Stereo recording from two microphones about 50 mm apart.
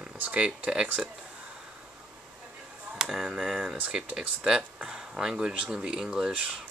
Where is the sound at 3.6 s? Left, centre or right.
Centre.